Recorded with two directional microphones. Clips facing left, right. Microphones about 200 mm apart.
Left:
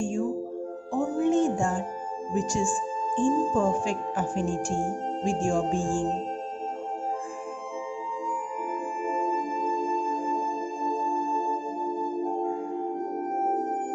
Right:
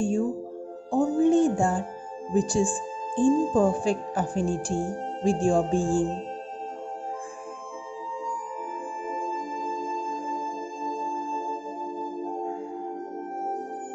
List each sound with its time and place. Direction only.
0.9 s music: 35° right (ahead or behind)
2.3 s speech: 35° right (ahead or behind)